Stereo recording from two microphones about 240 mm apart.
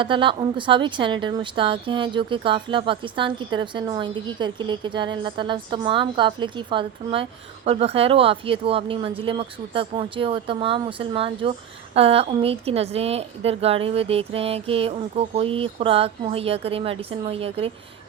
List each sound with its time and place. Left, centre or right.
0.0 s a woman's voice: right